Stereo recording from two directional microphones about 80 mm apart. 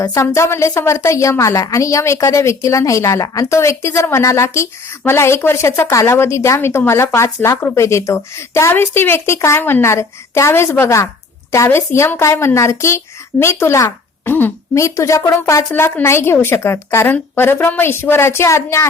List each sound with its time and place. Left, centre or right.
0.2 s speech: left
13.8 s a sound: left
14.8 s speech: left
15.7 s a woman's voice: left